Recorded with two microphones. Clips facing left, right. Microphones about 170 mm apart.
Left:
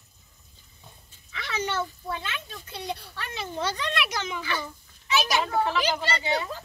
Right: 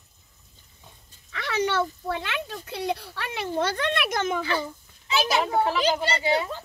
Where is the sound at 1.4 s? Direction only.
65° right (ahead or behind).